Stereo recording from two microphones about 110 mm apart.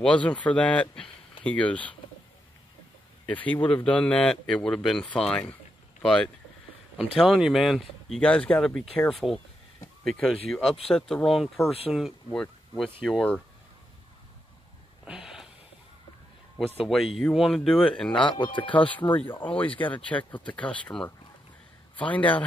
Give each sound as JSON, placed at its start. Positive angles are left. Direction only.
{"t": 0.0, "sound": "speech", "side_deg": 10}
{"t": 3.3, "sound": "speech", "side_deg": 15}
{"t": 8.2, "sound": "speech", "side_deg": 10}
{"t": 15.0, "sound": "a sound", "side_deg": -5}
{"t": 16.5, "sound": "speech", "side_deg": 0}
{"t": 18.2, "sound": "speech", "side_deg": 45}
{"t": 19.1, "sound": "a man's voice", "side_deg": 15}